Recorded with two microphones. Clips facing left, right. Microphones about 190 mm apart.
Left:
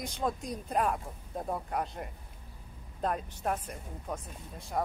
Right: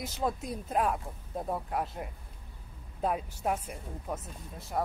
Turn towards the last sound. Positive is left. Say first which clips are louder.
# even
turn(degrees=0)  # may be behind; listen again after turning